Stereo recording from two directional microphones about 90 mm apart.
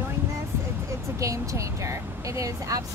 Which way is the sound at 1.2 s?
35° right (ahead or behind).